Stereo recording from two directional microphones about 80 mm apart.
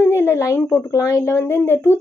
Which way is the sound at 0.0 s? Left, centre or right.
Left.